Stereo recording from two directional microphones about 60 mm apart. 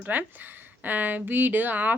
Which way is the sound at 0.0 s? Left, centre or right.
Right.